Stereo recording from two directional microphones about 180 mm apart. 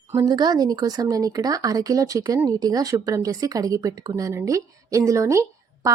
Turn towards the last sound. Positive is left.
turn(degrees=-15)  # may be behind; listen again after turning